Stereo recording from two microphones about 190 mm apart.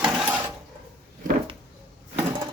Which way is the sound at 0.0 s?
5° right (ahead or behind).